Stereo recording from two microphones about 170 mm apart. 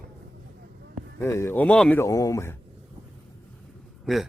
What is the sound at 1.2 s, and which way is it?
A man's voice, 15° left (ahead or behind).